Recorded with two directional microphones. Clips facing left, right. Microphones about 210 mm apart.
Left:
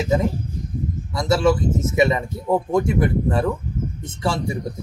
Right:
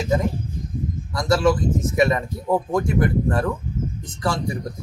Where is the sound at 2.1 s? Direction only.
Centre (ahead or behind).